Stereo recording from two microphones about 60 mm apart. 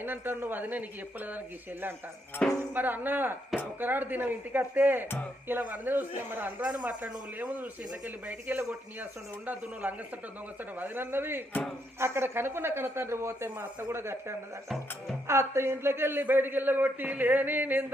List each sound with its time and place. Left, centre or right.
0.0 s a man's voice: right
2.6 s a man's voice: right
6.7 s a man's voice: right
9.8 s a man's voice: right